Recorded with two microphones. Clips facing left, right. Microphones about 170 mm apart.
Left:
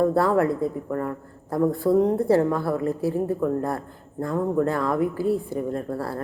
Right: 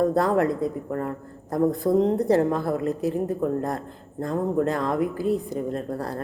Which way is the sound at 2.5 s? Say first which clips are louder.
Even; 20° right (ahead or behind).